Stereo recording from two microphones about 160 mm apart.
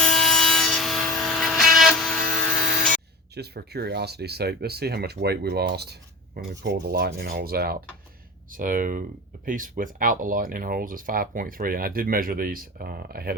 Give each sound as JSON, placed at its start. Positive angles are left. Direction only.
{"t": 0.0, "sound": "sawing", "side_deg": 5}
{"t": 3.3, "sound": "speech", "side_deg": -90}
{"t": 8.5, "sound": "speech", "side_deg": -55}